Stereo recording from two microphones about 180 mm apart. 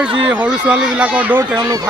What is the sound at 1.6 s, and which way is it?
Speech, 20° right (ahead or behind).